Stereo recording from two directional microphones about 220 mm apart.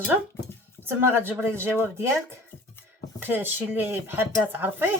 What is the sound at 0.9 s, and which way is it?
Speech, 10° right (ahead or behind).